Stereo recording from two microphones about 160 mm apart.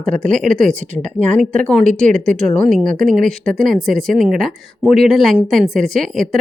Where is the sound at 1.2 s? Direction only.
50° right (ahead or behind).